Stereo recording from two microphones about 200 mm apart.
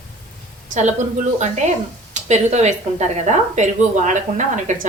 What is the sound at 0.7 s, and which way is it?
Speech, 35° right (ahead or behind).